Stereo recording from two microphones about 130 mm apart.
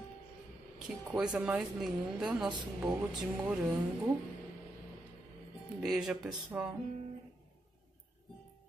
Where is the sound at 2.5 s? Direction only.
35° right (ahead or behind).